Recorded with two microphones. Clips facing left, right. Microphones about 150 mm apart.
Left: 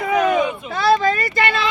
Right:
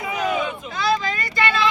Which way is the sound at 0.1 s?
55° left (ahead or behind).